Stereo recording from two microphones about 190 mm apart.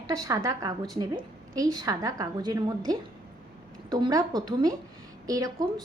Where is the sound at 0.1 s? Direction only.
20° right (ahead or behind).